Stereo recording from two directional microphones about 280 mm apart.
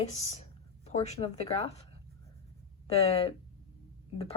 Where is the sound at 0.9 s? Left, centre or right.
Left.